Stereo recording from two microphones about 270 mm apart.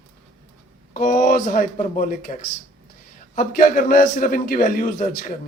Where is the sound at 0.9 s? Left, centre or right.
Left.